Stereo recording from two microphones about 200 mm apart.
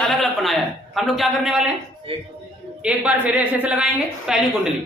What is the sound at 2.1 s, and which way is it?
Speech, 25° right (ahead or behind).